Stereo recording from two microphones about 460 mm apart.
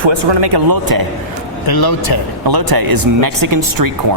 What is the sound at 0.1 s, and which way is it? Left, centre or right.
Speech, right.